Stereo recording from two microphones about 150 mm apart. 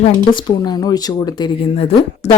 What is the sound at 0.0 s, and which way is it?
Speech, 35° left (ahead or behind).